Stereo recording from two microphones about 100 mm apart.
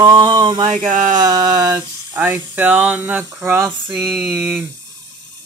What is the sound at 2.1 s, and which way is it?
Speech, 20° right (ahead or behind).